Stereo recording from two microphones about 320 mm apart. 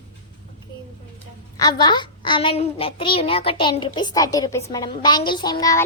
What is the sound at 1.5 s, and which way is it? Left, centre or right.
A child's voice, centre.